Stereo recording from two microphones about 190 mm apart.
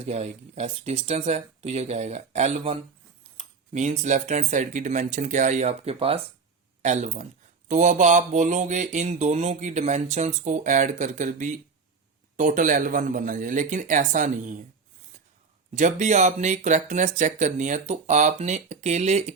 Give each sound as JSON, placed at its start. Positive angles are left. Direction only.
{"t": 0.0, "sound": "a man's voice", "side_deg": -35}
{"t": 15.7, "sound": "speech", "side_deg": -40}